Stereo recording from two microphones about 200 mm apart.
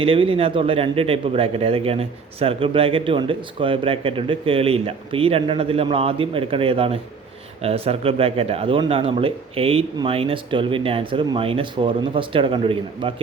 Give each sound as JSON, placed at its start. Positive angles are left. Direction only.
{"t": 0.0, "sound": "a man's voice", "side_deg": -25}